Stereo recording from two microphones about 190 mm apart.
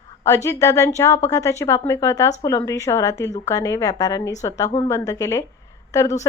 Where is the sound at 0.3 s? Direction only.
15° left (ahead or behind).